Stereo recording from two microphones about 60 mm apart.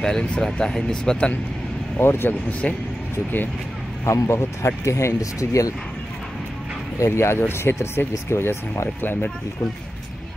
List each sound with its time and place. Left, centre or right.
0.0 s speech: centre
2.0 s speech: left
2.6 s speech: centre
4.0 s speech: left
4.8 s speech: left
7.1 s speech: left